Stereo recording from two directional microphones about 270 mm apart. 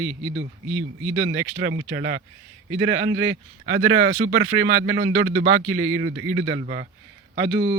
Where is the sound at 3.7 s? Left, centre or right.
Right.